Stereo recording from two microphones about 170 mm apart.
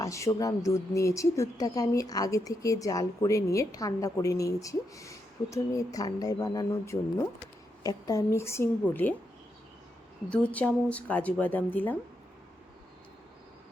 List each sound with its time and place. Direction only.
0.0 s a woman's voice: 20° left (ahead or behind)
10.2 s speech: 10° left (ahead or behind)